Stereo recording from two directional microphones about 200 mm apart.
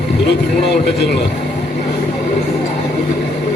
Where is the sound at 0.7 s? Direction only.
60° left (ahead or behind).